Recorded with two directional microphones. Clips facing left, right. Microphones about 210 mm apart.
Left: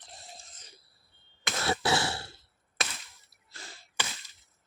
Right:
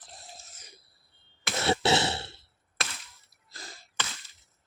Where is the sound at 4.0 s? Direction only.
10° left (ahead or behind).